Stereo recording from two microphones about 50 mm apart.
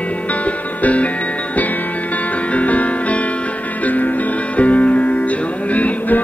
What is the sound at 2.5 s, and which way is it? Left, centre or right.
Music, left.